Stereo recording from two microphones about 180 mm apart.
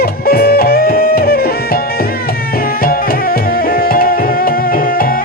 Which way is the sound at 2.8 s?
55° left (ahead or behind).